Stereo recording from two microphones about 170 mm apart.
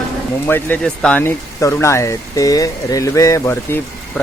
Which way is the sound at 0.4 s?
10° left (ahead or behind).